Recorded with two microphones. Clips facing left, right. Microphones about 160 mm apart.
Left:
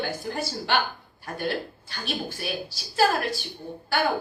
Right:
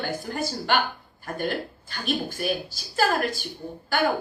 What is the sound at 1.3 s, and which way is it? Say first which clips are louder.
A woman's voice: right 1 dB; 50° right (ahead or behind).